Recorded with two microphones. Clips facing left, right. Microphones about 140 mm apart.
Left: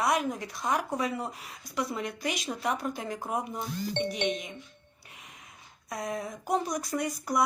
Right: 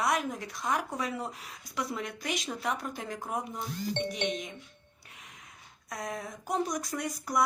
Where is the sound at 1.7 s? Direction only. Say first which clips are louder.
Left 3 dB; centre (ahead or behind).